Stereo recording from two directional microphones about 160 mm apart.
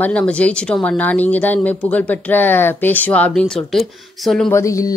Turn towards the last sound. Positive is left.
turn(degrees=20)  # may be behind; listen again after turning